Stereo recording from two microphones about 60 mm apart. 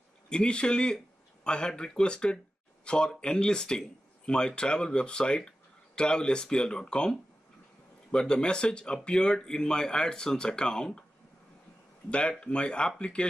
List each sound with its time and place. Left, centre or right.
0.3 s speech: centre
12.1 s speech: centre